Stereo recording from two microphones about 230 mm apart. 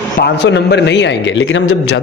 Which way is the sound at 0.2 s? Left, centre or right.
Left.